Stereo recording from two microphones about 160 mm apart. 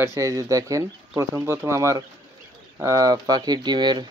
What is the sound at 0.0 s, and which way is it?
Speech, 20° right (ahead or behind).